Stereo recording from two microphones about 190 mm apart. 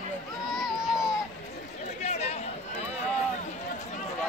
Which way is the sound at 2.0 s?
35° left (ahead or behind).